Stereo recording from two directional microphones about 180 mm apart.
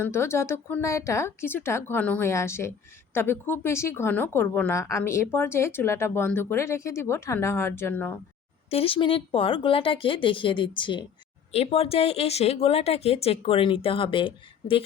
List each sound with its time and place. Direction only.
0.0 s a woman's voice: 15° left (ahead or behind)
8.7 s speech: 30° left (ahead or behind)